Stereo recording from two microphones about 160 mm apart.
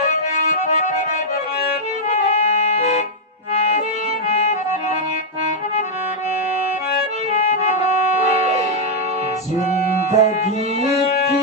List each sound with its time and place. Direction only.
2.0 s music: 45° left (ahead or behind)
3.5 s accordion: 45° left (ahead or behind)
7.3 s music: 45° left (ahead or behind)
10.1 s music: 45° left (ahead or behind)